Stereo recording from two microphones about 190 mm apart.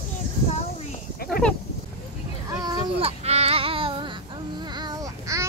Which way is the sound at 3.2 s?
35° right (ahead or behind).